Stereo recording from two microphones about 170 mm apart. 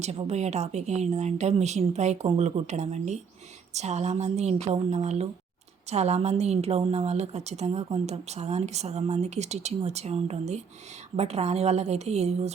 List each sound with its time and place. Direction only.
0.0 s a woman's voice: 40° right (ahead or behind)